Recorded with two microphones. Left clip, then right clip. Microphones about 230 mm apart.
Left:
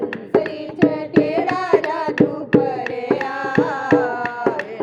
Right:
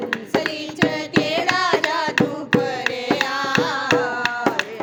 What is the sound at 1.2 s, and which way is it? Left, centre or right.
Carnatic music, right.